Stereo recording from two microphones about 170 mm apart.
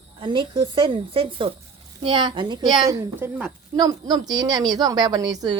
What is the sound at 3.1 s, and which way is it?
Speech, 10° right (ahead or behind).